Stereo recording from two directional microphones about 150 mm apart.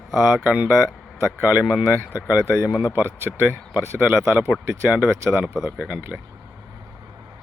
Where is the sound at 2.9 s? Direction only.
15° right (ahead or behind).